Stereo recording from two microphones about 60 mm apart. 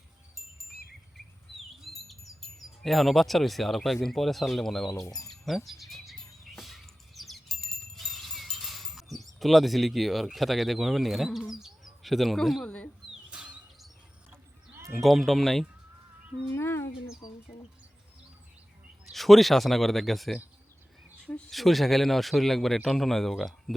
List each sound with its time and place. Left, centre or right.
1.8 s speech: centre
5.3 s bird: centre
12.6 s speech: centre
13.3 s bird flight: centre
15.0 s speech: centre
16.5 s speech: left
19.1 s speech: centre
21.5 s speech: centre